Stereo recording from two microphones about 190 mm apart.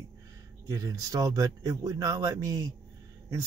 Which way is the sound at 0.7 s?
15° right (ahead or behind).